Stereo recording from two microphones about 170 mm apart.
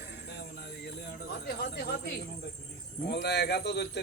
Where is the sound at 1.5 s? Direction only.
65° left (ahead or behind).